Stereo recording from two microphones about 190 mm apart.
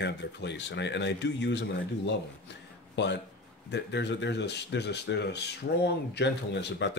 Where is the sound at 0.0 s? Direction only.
65° left (ahead or behind).